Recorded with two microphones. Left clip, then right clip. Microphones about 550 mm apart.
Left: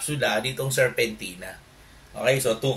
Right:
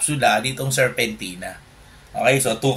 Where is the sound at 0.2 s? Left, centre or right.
Left.